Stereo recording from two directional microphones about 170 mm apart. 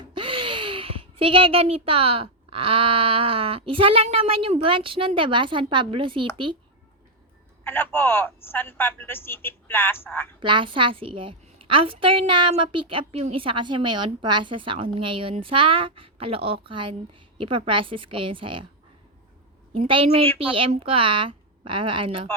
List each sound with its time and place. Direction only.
0.0 s a child's voice: 30° right (ahead or behind)
7.6 s speech: 10° left (ahead or behind)
10.4 s a woman's voice: 30° right (ahead or behind)
19.7 s a woman's voice: 30° right (ahead or behind)